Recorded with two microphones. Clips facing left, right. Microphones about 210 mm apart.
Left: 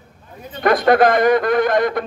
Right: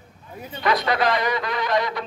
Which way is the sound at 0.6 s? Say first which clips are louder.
Left 8 dB; 50° left (ahead or behind).